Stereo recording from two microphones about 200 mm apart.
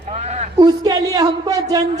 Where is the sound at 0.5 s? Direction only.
20° right (ahead or behind).